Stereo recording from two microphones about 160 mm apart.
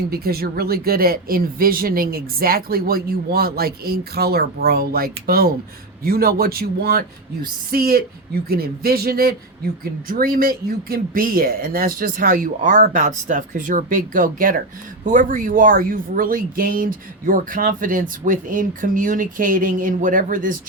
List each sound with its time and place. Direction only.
0.1 s speech: 75° right (ahead or behind); by 20.6 s 60° right (ahead or behind)